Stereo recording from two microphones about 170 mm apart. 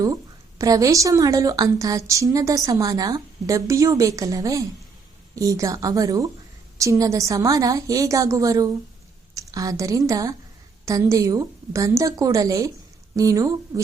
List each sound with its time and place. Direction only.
0.6 s a woman's voice: 20° right (ahead or behind)